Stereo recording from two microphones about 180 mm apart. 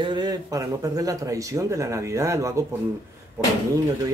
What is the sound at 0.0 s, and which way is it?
Speech, 25° right (ahead or behind).